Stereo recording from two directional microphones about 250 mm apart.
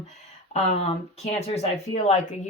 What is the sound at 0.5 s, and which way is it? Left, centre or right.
Speech, left.